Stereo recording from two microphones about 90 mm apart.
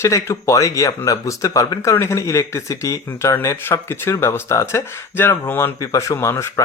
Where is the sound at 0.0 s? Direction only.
30° left (ahead or behind).